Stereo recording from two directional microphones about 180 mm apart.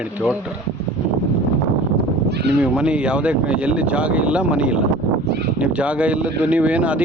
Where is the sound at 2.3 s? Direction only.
65° right (ahead or behind).